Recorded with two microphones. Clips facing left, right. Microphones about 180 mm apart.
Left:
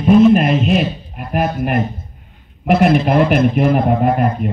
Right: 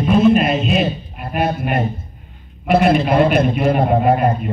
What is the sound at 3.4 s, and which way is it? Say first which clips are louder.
Speech: left 2 dB; 30° right (ahead or behind).